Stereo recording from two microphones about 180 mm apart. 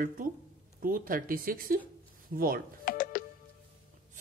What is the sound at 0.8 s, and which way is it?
Speech, 50° right (ahead or behind).